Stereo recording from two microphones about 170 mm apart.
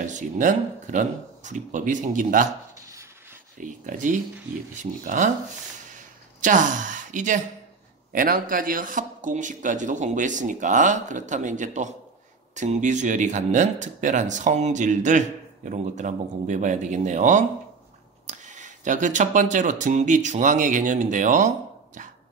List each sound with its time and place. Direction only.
0.0 s speech: 45° right (ahead or behind)
3.5 s speech: 50° right (ahead or behind)
5.9 s a sound: 50° right (ahead or behind)
8.1 s speech: 55° right (ahead or behind)